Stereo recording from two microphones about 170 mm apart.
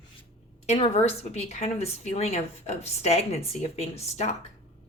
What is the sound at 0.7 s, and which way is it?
A woman's voice, 35° left (ahead or behind).